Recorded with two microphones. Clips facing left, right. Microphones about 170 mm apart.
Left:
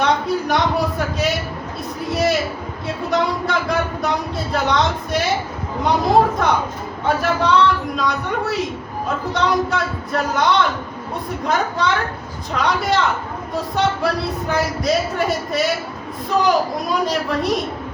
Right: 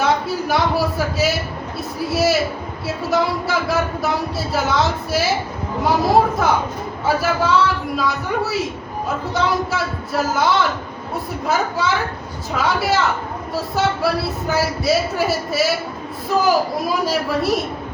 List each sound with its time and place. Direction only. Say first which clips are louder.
0.0 s a sound: left 1 dB; 5° right (ahead or behind)
2.0 s speech: right 1 dB; 5° right (ahead or behind)
7.0 s speech: even; 5° right (ahead or behind)